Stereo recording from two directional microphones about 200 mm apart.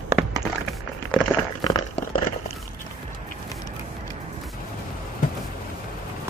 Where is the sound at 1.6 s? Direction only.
20° left (ahead or behind).